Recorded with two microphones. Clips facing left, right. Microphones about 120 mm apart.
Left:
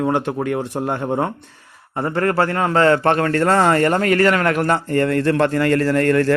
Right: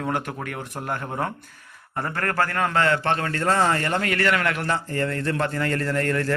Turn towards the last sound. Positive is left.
turn(degrees=80)